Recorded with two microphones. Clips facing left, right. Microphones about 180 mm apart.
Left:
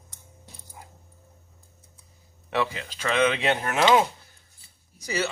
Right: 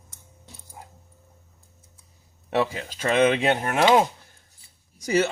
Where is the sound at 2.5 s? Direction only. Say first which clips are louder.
Right 3 dB; 40° right (ahead or behind).